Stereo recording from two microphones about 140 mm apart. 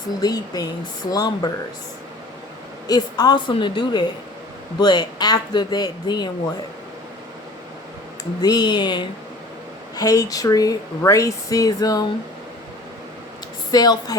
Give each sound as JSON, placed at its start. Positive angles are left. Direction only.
{"t": 0.2, "sound": "speech", "side_deg": 25}
{"t": 2.8, "sound": "speech", "side_deg": 25}
{"t": 8.2, "sound": "speech", "side_deg": 30}
{"t": 13.7, "sound": "speech", "side_deg": 30}